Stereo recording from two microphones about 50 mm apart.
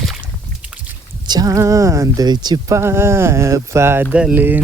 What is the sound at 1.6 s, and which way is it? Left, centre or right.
Speech, right.